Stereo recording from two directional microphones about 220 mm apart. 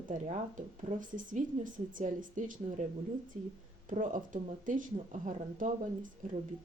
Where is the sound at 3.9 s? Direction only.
35° right (ahead or behind).